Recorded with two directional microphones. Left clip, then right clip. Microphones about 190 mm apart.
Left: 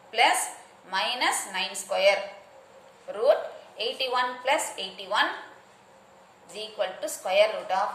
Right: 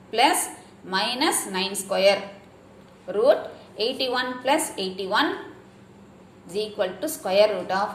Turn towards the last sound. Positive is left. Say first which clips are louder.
# right 3 dB
turn(degrees=-15)  # may be behind; listen again after turning